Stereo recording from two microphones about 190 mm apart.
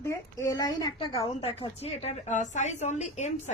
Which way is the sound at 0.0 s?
15° left (ahead or behind).